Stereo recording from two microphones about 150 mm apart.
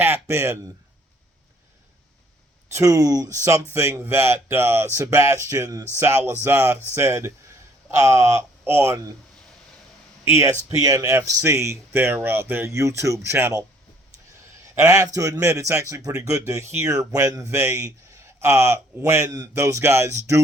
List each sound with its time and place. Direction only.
0.0 s speech: 15° right (ahead or behind)
2.7 s a man's voice: 20° right (ahead or behind)
10.3 s a man's voice: 20° right (ahead or behind)
14.8 s a man's voice: 20° right (ahead or behind)